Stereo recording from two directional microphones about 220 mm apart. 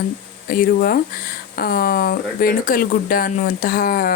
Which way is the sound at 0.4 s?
45° left (ahead or behind).